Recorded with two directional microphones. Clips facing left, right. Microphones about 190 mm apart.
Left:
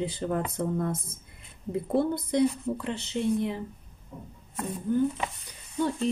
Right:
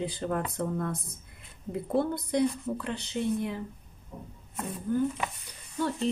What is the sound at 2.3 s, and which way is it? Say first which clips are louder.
Speech: left 2 dB; 20° left (ahead or behind).